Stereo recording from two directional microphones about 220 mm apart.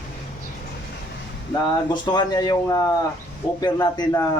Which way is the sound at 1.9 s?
20° left (ahead or behind).